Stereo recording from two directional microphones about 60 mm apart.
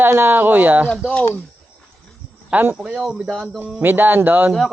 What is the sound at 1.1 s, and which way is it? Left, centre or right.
Speech, left.